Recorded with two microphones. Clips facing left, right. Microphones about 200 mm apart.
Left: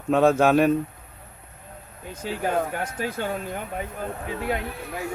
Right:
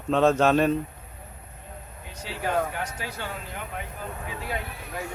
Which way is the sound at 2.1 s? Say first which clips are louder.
Left 3 dB; 50° left (ahead or behind).